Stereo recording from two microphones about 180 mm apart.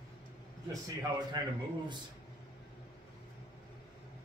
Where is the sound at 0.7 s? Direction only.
20° right (ahead or behind).